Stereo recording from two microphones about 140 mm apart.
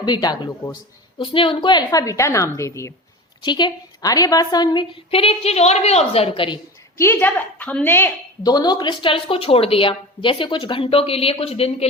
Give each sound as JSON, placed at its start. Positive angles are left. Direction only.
{"t": 0.0, "sound": "a woman's voice", "side_deg": 30}
{"t": 1.2, "sound": "a woman's voice", "side_deg": 40}
{"t": 3.4, "sound": "a woman's voice", "side_deg": 30}
{"t": 6.9, "sound": "a woman's voice", "side_deg": 20}
{"t": 8.4, "sound": "a woman's voice", "side_deg": 30}